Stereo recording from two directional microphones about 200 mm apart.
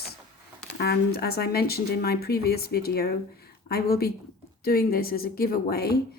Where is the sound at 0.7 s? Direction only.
55° left (ahead or behind).